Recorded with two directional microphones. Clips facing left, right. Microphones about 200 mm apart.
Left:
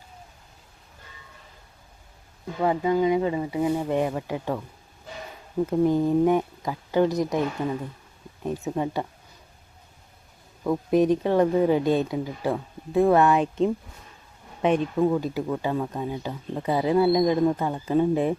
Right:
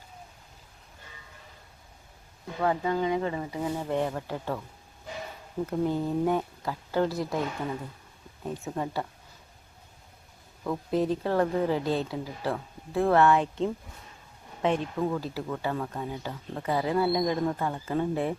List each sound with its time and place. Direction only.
2.6 s speech: 15° left (ahead or behind)
5.6 s speech: 15° left (ahead or behind)
8.4 s speech: 20° left (ahead or behind)
10.6 s speech: 15° left (ahead or behind)